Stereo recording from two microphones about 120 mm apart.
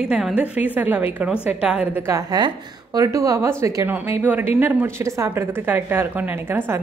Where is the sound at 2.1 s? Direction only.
30° right (ahead or behind).